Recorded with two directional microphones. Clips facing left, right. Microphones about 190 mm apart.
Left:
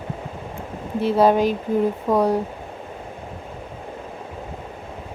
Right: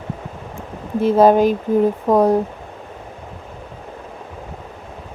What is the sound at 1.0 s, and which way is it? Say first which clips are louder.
A woman's voice: right 4 dB; 45° right (ahead or behind).